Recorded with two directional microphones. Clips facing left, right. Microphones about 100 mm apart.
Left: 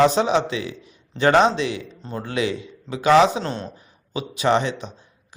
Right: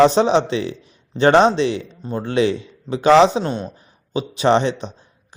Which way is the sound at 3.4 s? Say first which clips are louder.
Right 4 dB; 15° right (ahead or behind).